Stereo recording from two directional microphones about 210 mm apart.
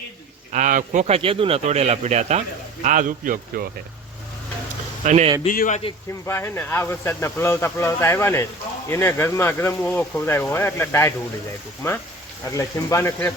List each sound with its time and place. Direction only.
0.5 s speech: 40° right (ahead or behind)
5.0 s speech: 35° right (ahead or behind)
5.5 s a man's voice: 40° left (ahead or behind)
6.2 s speech: 10° left (ahead or behind)
12.5 s speech: 15° left (ahead or behind)